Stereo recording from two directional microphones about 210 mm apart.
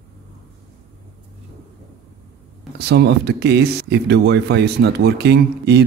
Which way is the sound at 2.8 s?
50° right (ahead or behind).